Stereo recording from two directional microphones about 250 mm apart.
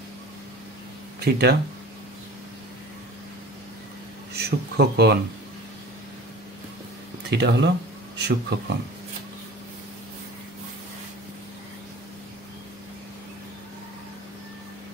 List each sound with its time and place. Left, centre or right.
1.2 s speech: right
4.3 s speech: right
7.2 s speech: right